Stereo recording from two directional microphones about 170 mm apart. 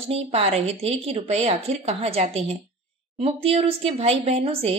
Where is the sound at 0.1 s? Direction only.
40° right (ahead or behind).